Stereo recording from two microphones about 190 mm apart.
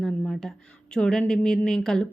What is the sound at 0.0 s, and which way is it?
A woman's voice, 5° left (ahead or behind).